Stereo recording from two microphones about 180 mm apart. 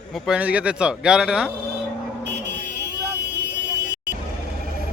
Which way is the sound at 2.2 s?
70° right (ahead or behind).